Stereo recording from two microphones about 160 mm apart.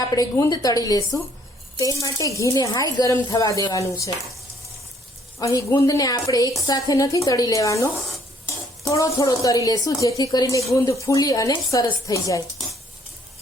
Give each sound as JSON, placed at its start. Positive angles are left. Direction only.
{"t": 0.1, "sound": "a woman's voice", "side_deg": 20}
{"t": 5.4, "sound": "a woman's voice", "side_deg": 20}
{"t": 8.9, "sound": "a woman's voice", "side_deg": 20}